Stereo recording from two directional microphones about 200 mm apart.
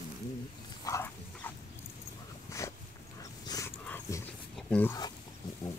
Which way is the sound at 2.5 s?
15° left (ahead or behind).